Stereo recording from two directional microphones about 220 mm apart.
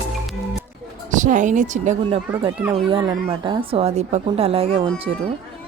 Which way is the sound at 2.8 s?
25° right (ahead or behind).